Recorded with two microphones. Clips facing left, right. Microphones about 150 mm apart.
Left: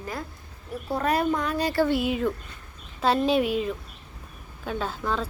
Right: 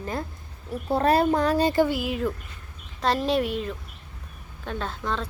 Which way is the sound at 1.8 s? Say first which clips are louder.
Left 2 dB; centre (ahead or behind).